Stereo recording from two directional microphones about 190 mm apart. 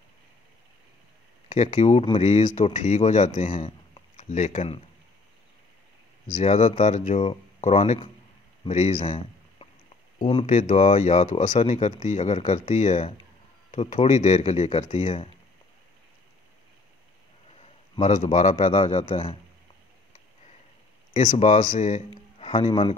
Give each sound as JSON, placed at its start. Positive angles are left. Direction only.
{"t": 1.5, "sound": "speech", "side_deg": 35}
{"t": 6.2, "sound": "speech", "side_deg": 40}
{"t": 17.5, "sound": "speech", "side_deg": 35}
{"t": 21.1, "sound": "speech", "side_deg": 40}